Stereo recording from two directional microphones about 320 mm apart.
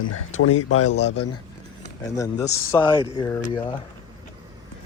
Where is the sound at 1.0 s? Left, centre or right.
Centre.